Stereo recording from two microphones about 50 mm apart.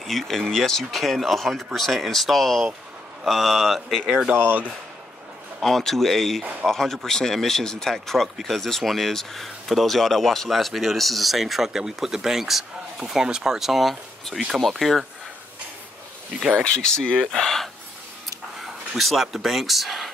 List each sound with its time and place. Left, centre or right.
0.0 s speech: centre
4.3 s speech: right
5.6 s speech: centre
16.8 s speech: centre
18.6 s a sound: centre
19.2 s speech: centre